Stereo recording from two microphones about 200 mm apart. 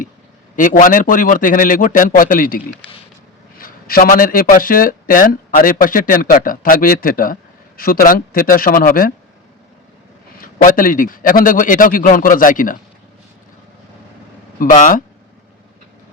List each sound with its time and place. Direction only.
0.5 s a man's voice: 40° left (ahead or behind)
3.6 s a man's voice: 45° left (ahead or behind)
10.4 s a man's voice: 45° left (ahead or behind)
14.6 s a man's voice: 40° left (ahead or behind)